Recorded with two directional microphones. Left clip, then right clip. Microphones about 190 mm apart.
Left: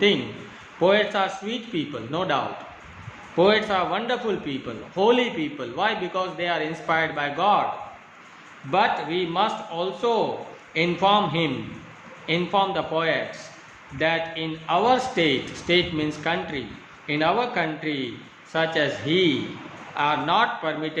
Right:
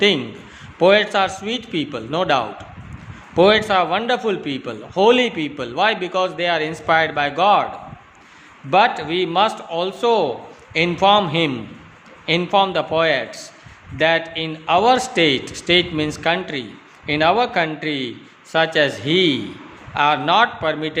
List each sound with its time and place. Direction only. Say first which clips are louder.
0.8 s a man's voice: right 6 dB; 65° right (ahead or behind)
8.7 s a man's voice: right 6 dB; 65° right (ahead or behind)